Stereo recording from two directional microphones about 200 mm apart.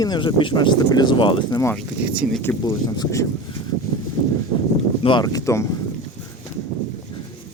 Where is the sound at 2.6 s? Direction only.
20° left (ahead or behind).